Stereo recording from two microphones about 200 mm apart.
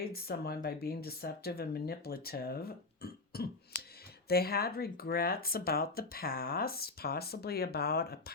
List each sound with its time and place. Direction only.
0.0 s speech: 50° left (ahead or behind)